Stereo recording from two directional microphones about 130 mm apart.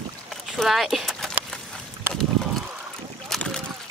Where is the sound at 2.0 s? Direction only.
15° right (ahead or behind).